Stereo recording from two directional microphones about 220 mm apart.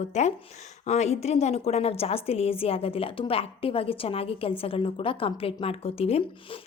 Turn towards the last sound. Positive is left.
turn(degrees=25)  # may be behind; listen again after turning